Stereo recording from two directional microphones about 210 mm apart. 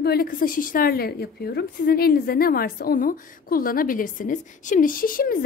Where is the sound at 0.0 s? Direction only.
45° left (ahead or behind).